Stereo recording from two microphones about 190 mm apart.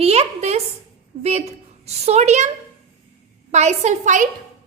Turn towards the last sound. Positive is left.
turn(degrees=-40)  # may be behind; listen again after turning